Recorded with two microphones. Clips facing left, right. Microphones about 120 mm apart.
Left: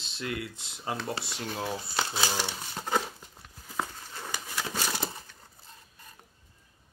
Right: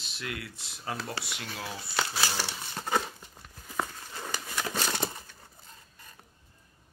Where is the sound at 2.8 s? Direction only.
5° left (ahead or behind).